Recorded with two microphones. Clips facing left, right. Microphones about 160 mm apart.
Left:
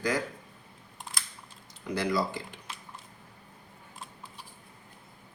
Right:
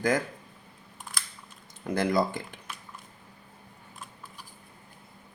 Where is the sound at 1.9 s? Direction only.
50° right (ahead or behind).